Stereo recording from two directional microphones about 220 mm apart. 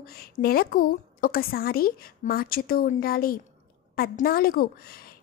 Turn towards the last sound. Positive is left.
turn(degrees=40)  # may be behind; listen again after turning